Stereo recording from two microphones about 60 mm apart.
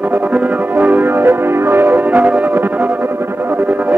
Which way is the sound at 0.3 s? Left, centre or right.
Right.